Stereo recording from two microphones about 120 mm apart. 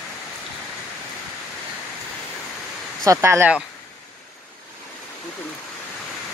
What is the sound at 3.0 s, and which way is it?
Speech, 25° right (ahead or behind).